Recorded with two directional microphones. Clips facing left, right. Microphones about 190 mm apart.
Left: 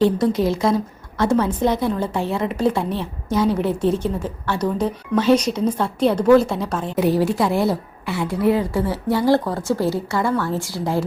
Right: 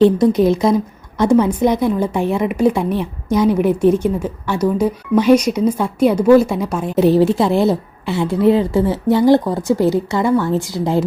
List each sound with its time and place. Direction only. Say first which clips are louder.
0.0 s a woman's voice: right 6 dB; 20° right (ahead or behind)
6.9 s speech: right 6 dB; 25° right (ahead or behind)